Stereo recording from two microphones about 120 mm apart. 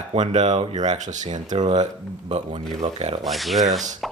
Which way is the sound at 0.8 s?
85° right.